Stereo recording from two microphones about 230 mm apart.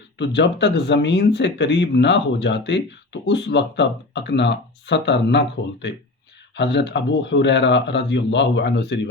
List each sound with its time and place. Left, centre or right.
0.2 s speech: left